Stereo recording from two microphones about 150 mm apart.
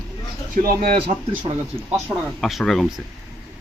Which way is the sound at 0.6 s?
65° right (ahead or behind).